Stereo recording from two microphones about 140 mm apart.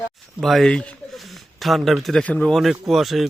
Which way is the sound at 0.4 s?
Centre (ahead or behind).